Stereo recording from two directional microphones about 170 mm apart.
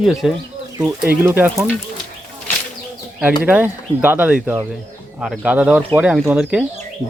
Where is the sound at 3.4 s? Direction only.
10° right (ahead or behind).